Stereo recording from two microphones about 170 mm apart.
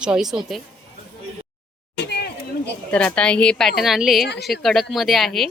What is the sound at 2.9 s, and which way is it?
A woman's voice, 5° left (ahead or behind).